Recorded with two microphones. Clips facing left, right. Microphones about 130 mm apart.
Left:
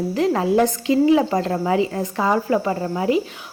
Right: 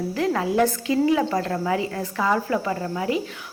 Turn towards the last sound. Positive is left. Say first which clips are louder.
# left 5 dB
turn(degrees=25)  # may be behind; listen again after turning